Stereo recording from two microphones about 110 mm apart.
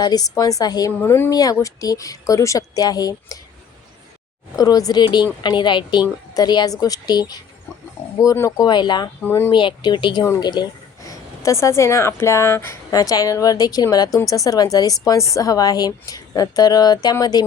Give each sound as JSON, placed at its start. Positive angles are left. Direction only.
{"t": 0.0, "sound": "a woman's voice", "side_deg": 35}
{"t": 1.0, "sound": "speech", "side_deg": 20}
{"t": 1.3, "sound": "a woman's voice", "side_deg": 35}
{"t": 4.5, "sound": "a woman's voice", "side_deg": 35}
{"t": 9.2, "sound": "speech", "side_deg": 20}
{"t": 9.5, "sound": "speech", "side_deg": 45}
{"t": 11.0, "sound": "a woman's voice", "side_deg": 30}